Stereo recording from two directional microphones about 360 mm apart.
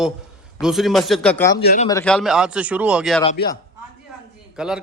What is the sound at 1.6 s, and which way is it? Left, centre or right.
Speech, left.